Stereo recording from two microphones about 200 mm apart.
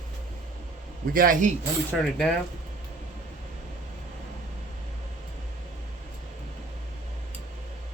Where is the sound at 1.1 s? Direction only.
45° right (ahead or behind).